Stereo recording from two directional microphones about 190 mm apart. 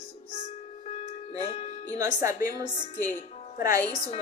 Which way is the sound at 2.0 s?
15° right (ahead or behind).